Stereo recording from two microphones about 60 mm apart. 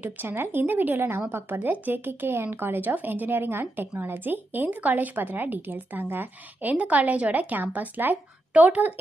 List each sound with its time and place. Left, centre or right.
0.0 s a woman's voice: right